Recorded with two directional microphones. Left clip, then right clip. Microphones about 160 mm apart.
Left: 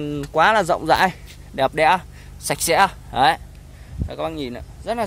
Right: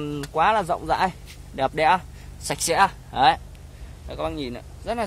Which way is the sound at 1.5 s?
20° left (ahead or behind).